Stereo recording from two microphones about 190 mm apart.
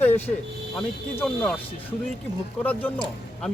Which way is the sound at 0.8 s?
Centre (ahead or behind).